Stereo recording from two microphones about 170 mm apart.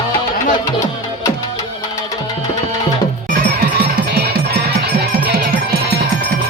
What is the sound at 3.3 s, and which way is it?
Music, 60° right (ahead or behind).